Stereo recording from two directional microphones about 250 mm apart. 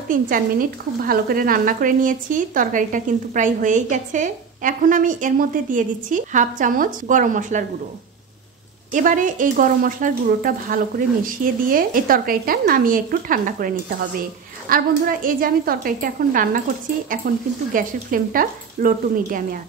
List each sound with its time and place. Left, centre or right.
0.1 s speech: right
8.9 s speech: right
17.7 s speech: right